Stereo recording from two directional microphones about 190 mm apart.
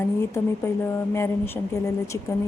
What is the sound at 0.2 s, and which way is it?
Speech, 15° left (ahead or behind).